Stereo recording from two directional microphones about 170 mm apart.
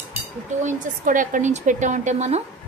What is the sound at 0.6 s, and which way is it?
A woman's voice, 50° right (ahead or behind).